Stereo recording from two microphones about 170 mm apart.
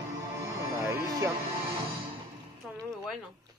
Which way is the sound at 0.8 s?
20° right (ahead or behind).